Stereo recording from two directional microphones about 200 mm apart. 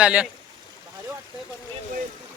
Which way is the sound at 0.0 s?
5° right (ahead or behind).